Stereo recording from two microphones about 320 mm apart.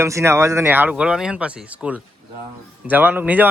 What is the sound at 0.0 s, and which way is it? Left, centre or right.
Speech, centre.